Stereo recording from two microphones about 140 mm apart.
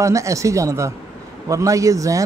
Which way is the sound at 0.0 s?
20° right (ahead or behind).